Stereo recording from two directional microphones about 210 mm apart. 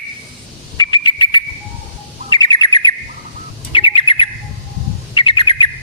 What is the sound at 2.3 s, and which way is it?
Bird, 20° left (ahead or behind).